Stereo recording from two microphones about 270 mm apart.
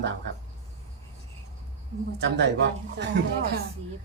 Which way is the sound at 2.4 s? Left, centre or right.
Right.